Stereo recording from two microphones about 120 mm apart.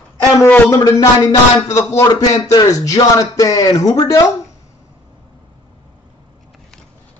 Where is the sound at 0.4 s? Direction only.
20° left (ahead or behind).